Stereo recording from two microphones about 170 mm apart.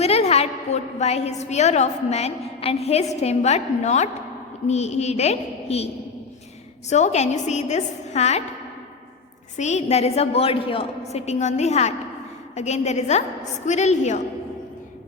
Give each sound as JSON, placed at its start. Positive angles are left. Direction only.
{"t": 0.0, "sound": "a woman's voice", "side_deg": 35}
{"t": 6.9, "sound": "a woman's voice", "side_deg": 40}
{"t": 9.6, "sound": "a woman's voice", "side_deg": 40}